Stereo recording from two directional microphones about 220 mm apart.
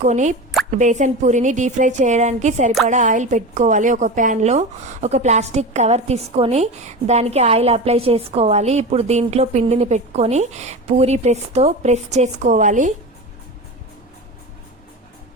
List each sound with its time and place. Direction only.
0.0 s a woman's voice: 35° right (ahead or behind)